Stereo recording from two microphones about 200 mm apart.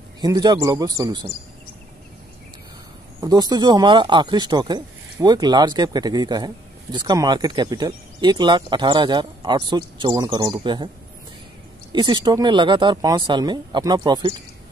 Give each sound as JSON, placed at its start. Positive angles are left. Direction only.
{"t": 0.2, "sound": "a man's voice", "side_deg": -20}
{"t": 3.2, "sound": "speech", "side_deg": -20}
{"t": 11.9, "sound": "speech", "side_deg": -20}